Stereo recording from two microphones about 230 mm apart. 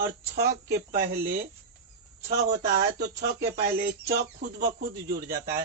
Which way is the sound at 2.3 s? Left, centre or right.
Right.